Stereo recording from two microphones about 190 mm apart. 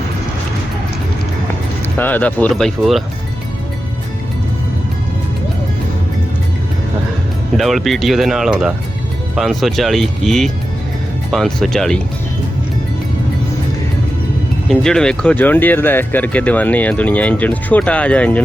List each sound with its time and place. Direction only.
2.0 s speech: 10° left (ahead or behind)
7.5 s speech: centre (ahead or behind)
14.7 s speech: 5° left (ahead or behind)